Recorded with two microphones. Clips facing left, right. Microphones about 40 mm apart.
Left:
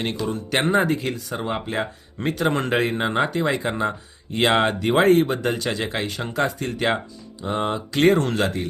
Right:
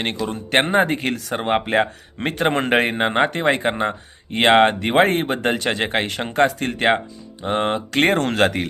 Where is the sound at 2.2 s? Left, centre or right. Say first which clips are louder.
Right 2 dB; right.